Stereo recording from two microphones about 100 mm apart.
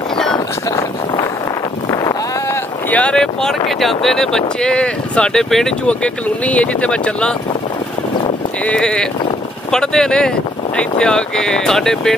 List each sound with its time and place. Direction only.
2.9 s speech: 10° left (ahead or behind)
8.6 s speech: 10° left (ahead or behind)